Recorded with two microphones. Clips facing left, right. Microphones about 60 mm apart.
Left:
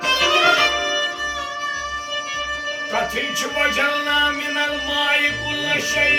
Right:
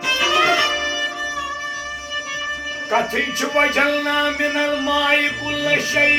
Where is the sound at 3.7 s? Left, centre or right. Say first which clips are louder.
Right 1 dB; right.